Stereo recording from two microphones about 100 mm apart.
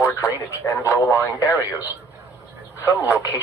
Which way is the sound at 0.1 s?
35° left (ahead or behind).